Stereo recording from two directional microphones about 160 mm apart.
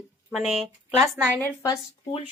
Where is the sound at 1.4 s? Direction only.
20° left (ahead or behind).